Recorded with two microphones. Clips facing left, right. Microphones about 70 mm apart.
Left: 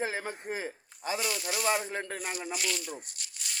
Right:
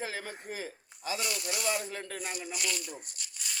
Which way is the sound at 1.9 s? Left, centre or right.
Left.